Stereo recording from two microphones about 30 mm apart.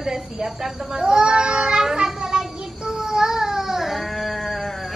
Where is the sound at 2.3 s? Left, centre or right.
Right.